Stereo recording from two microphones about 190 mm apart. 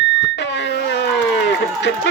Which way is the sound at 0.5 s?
65° left (ahead or behind).